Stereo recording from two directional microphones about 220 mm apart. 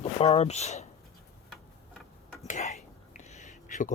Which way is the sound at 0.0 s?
30° left (ahead or behind).